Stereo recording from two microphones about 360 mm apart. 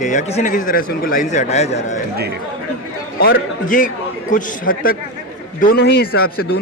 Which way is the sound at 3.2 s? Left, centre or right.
Left.